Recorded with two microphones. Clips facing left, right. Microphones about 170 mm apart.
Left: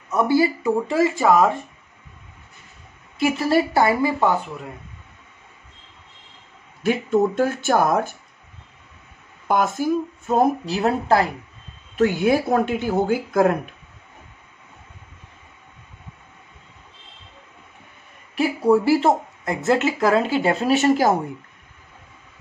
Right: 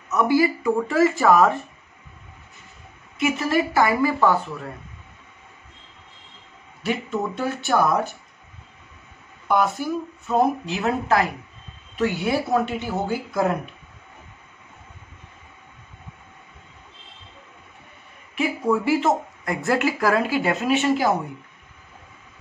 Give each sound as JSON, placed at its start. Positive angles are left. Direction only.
{"t": 0.1, "sound": "speech", "side_deg": 30}
{"t": 3.2, "sound": "a woman's voice", "side_deg": 30}
{"t": 6.8, "sound": "speech", "side_deg": 50}
{"t": 9.5, "sound": "speech", "side_deg": 45}
{"t": 12.0, "sound": "speech", "side_deg": 50}
{"t": 18.3, "sound": "speech", "side_deg": 35}